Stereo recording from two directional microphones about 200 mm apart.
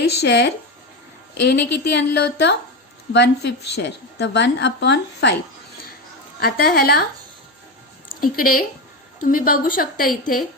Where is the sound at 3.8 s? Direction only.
60° left (ahead or behind).